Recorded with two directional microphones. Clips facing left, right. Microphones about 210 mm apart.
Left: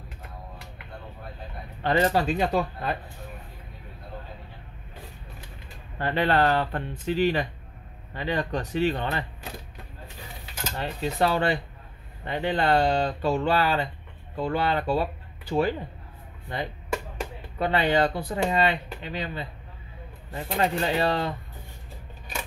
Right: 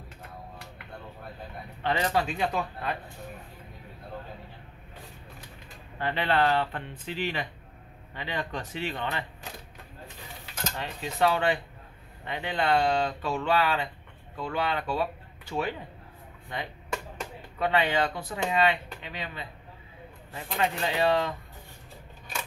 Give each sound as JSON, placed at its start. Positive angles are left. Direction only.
{"t": 1.8, "sound": "speech", "side_deg": 40}
{"t": 5.9, "sound": "speech", "side_deg": 40}
{"t": 10.8, "sound": "speech", "side_deg": 35}
{"t": 17.6, "sound": "speech", "side_deg": 35}